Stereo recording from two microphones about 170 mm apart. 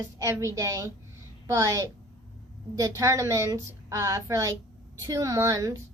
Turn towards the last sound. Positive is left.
turn(degrees=-20)  # may be behind; listen again after turning